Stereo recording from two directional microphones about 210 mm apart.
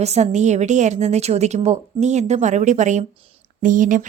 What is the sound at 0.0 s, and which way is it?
A woman's voice, 30° right (ahead or behind).